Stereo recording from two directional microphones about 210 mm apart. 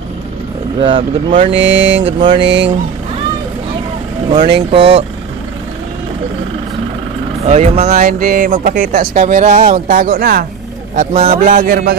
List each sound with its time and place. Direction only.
0.7 s speech: 25° right (ahead or behind)
1.5 s a sound: 65° right (ahead or behind)
4.6 s speech: 30° right (ahead or behind)
7.4 s speech: 30° right (ahead or behind)